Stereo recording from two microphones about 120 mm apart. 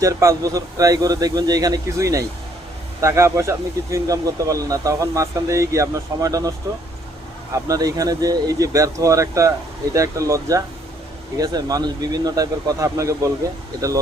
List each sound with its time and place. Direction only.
0.0 s speech: 25° right (ahead or behind)
7.5 s speech: 30° right (ahead or behind)